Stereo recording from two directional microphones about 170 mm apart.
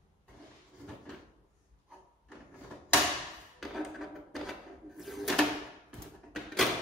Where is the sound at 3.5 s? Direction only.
Centre (ahead or behind).